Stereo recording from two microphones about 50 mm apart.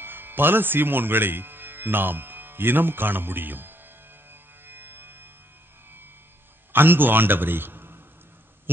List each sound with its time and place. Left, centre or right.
0.0 s speech: right
4.3 s music: right
6.7 s a man's voice: right